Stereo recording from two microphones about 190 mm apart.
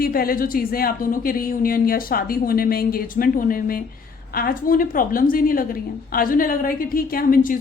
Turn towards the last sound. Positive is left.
turn(degrees=45)  # may be behind; listen again after turning